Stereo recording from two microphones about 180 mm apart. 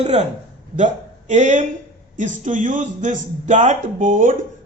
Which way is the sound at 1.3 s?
40° right (ahead or behind).